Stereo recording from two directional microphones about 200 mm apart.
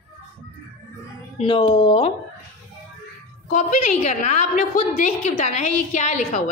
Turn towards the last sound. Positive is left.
turn(degrees=35)  # may be behind; listen again after turning